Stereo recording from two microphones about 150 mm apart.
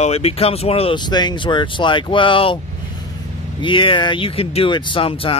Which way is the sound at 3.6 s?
35° left (ahead or behind).